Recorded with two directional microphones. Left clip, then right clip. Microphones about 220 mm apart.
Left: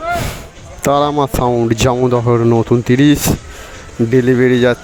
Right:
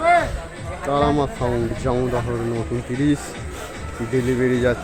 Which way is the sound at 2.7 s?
40° left (ahead or behind).